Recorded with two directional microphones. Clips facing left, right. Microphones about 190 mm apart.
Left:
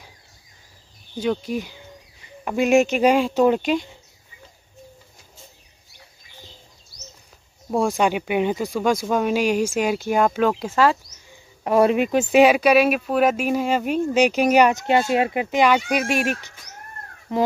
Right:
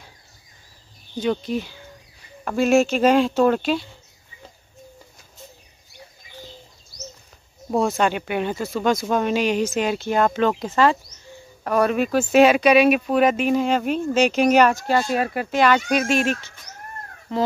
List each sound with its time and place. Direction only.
1.2 s speech: 10° left (ahead or behind)
7.7 s speech: 10° left (ahead or behind)
11.6 s speech: 20° left (ahead or behind)